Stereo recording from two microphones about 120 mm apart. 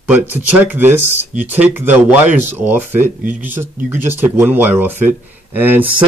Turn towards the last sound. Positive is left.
turn(degrees=-15)  # may be behind; listen again after turning